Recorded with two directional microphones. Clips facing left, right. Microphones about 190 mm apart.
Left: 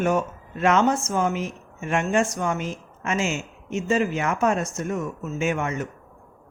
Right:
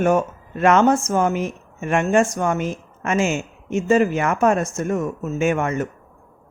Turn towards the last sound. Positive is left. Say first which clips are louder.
# right 5 dB
turn(degrees=-50)  # may be behind; listen again after turning